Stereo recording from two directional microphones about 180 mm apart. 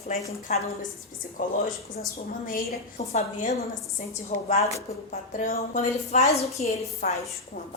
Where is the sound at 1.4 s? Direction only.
50° left (ahead or behind).